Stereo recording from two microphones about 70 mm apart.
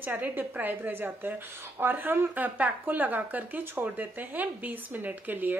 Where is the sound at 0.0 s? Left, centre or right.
Right.